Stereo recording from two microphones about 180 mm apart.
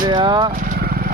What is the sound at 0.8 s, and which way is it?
Vehicle, 60° right (ahead or behind).